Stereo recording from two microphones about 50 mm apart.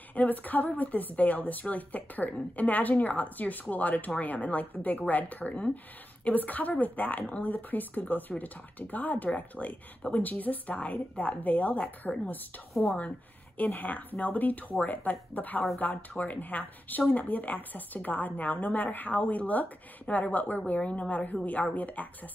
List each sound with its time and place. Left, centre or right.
0.1 s a woman's voice: left
13.6 s a woman's voice: left